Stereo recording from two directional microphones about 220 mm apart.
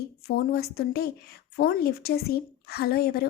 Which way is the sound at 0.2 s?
45° left (ahead or behind).